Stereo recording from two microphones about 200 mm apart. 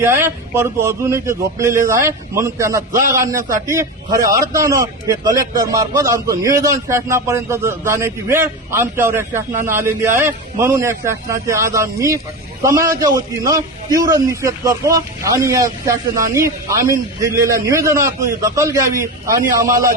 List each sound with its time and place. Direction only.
0.0 s a man's voice: 10° right (ahead or behind)